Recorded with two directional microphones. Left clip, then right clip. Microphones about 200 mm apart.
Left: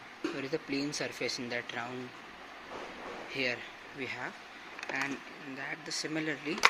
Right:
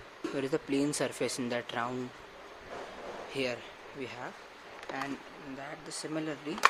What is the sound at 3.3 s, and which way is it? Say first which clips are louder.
Speech: left 1 dB; 25° right (ahead or behind).